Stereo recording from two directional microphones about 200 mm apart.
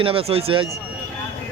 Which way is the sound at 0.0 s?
30° right (ahead or behind).